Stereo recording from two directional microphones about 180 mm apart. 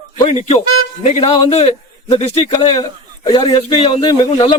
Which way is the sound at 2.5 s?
20° left (ahead or behind).